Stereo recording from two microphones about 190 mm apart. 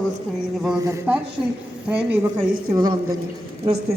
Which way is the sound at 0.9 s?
10° right (ahead or behind).